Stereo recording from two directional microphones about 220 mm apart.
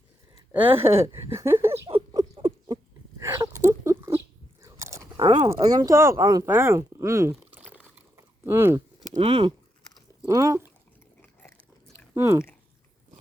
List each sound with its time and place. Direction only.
0.3 s a sound: 15° right (ahead or behind)
1.9 s rodents: 20° right (ahead or behind)
3.2 s a sound: 15° right (ahead or behind)
4.6 s biting: 15° right (ahead or behind)
5.5 s speech: 15° right (ahead or behind)
8.1 s a sound: 10° right (ahead or behind)
9.1 s speech: 25° right (ahead or behind)
10.2 s speech: 15° right (ahead or behind)
12.1 s speech: 10° right (ahead or behind)